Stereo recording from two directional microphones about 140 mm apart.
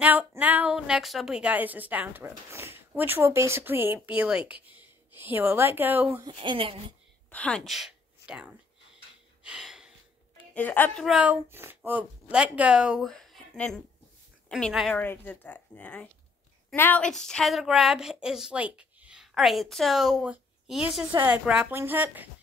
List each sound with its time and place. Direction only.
0.0 s a woman's voice: 10° right (ahead or behind)
6.2 s speech: 35° right (ahead or behind)
7.2 s speech: 10° left (ahead or behind)
9.4 s gasp: 5° right (ahead or behind)
10.5 s speech: 10° left (ahead or behind)
11.1 s a woman's voice: 10° right (ahead or behind)
13.1 s a sound: centre (ahead or behind)
14.5 s a woman's voice: centre (ahead or behind)